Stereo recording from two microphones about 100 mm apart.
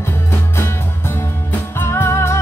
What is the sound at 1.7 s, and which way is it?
Music, 25° left (ahead or behind).